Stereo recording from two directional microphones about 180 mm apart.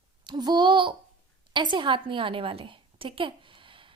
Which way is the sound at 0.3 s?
25° right (ahead or behind).